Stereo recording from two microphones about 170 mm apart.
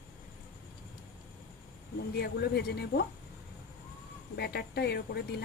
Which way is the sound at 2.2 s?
70° left (ahead or behind).